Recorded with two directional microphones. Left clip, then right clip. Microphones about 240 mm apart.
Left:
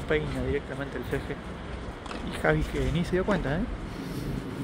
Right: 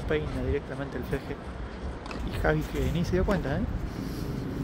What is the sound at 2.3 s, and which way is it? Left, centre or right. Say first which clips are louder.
Speech: left 2 dB; centre.